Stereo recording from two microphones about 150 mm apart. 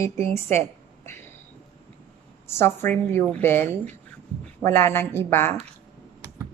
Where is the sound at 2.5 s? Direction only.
15° left (ahead or behind).